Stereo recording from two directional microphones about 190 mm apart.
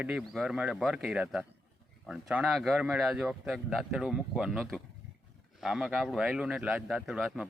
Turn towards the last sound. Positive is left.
turn(degrees=-5)  # may be behind; listen again after turning